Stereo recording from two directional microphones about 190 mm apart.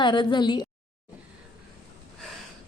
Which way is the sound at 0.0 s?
25° left (ahead or behind).